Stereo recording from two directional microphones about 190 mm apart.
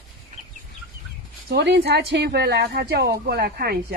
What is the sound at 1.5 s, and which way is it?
Speech, 60° right (ahead or behind).